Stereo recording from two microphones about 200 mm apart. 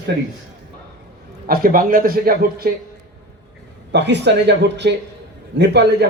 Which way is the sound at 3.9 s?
60° right (ahead or behind).